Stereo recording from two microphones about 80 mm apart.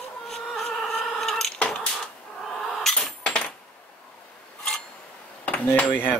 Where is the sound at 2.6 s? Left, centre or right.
Centre.